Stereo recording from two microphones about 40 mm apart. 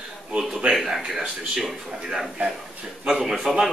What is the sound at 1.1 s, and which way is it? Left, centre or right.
Speech, centre.